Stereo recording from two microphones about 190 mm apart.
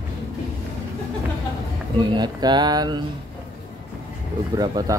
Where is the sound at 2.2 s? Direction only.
20° right (ahead or behind).